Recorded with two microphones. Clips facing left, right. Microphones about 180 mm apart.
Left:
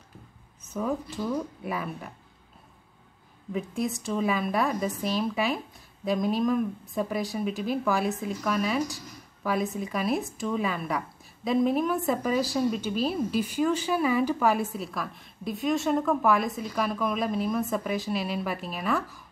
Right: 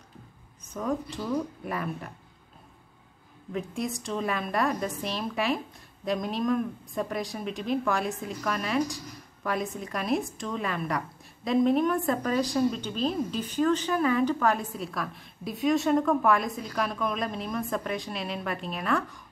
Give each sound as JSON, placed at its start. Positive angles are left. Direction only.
{"t": 0.7, "sound": "speech", "side_deg": 5}
{"t": 3.5, "sound": "speech", "side_deg": 0}